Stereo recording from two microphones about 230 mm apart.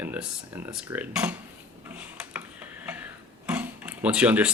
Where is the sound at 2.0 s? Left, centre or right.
Centre.